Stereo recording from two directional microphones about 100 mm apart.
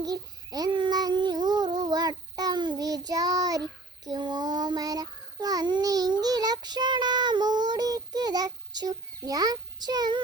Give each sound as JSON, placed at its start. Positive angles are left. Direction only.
{"t": 0.0, "sound": "child singing", "side_deg": -40}